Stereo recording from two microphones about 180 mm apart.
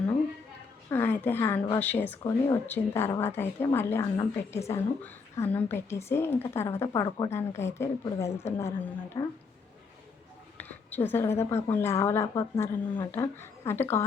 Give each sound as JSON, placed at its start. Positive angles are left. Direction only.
{"t": 0.9, "sound": "a woman's voice", "side_deg": 10}
{"t": 10.6, "sound": "a woman's voice", "side_deg": 10}